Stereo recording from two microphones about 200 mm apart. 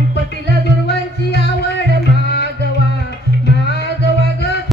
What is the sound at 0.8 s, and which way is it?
Music, 55° left (ahead or behind).